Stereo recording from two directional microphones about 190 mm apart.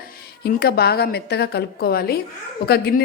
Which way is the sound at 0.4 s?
55° left (ahead or behind).